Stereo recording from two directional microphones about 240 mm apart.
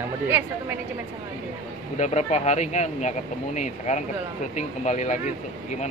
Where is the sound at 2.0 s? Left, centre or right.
Left.